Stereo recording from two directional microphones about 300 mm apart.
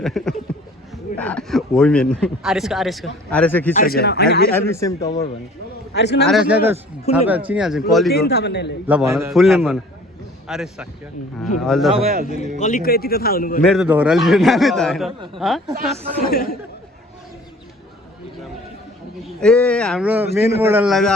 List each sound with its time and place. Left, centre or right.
0.0 s speech: centre
3.8 s speech: left
4.5 s speech: centre
5.9 s speech: left
6.2 s speech: centre
8.1 s speech: left
8.9 s speech: centre
12.0 s a man's voice: right
12.5 s a man's voice: left
13.7 s speech: centre
16.2 s a man's voice: left
19.4 s speech: centre